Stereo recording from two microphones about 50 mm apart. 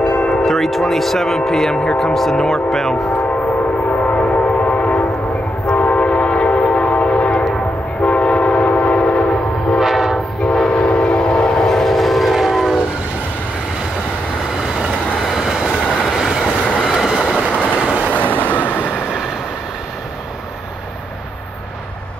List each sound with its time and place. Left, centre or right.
0.0 s a sound: left
0.5 s speech: centre
4.1 s train: left
9.8 s train: centre
10.4 s train: centre
15.2 s train: centre
17.4 s train: left
17.7 s train: right
18.1 s train: left